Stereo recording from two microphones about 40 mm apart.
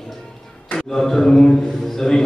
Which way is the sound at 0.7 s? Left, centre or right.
Centre.